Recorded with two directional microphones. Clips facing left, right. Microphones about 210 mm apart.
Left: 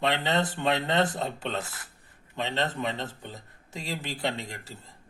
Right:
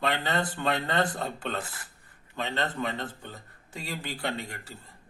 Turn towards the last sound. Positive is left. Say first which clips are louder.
# left 2 dB
turn(degrees=25)  # may be behind; listen again after turning